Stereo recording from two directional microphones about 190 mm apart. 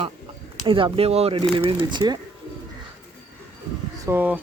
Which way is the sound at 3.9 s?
15° right (ahead or behind).